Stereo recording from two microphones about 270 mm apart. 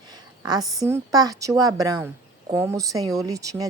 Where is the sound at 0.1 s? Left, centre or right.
Centre.